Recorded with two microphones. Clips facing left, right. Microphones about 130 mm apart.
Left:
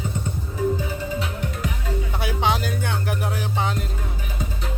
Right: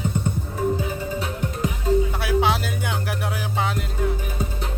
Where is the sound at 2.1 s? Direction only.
Centre (ahead or behind).